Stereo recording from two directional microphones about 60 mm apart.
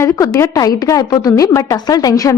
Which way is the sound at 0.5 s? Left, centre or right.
Left.